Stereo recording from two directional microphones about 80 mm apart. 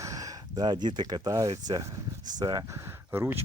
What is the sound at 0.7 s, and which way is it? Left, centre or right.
Speech, right.